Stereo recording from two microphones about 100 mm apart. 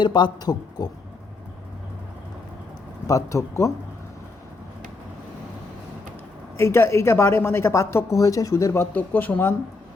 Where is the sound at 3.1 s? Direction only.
30° left (ahead or behind).